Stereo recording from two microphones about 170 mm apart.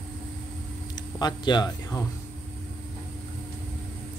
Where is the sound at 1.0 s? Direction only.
25° left (ahead or behind).